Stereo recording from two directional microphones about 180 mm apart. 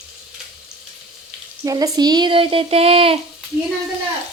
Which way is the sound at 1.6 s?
20° right (ahead or behind).